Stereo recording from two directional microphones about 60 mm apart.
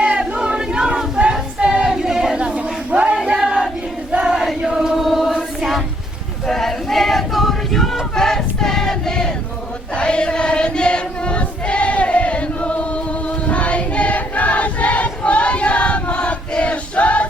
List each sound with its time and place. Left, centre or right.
0.0 s choir: centre
4.1 s a sound: centre
4.4 s chant: centre
5.0 s choir: centre
6.5 s choir: centre; by 17.2 s left